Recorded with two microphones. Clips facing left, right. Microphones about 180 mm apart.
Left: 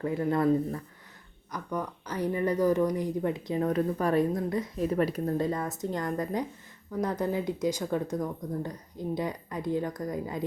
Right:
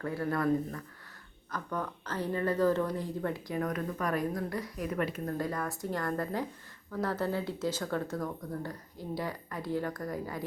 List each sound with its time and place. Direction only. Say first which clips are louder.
0.0 s speech: left 5 dB; 20° left (ahead or behind); by 5.3 s 35° left (ahead or behind)
5.4 s speech: left 4 dB; 25° left (ahead or behind)